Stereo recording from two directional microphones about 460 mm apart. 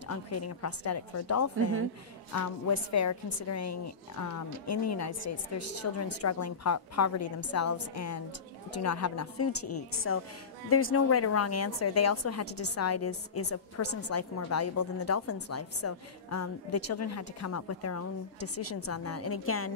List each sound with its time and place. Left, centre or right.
0.1 s a woman's voice: left